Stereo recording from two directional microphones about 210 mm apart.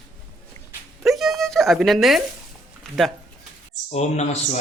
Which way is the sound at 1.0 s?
Centre (ahead or behind).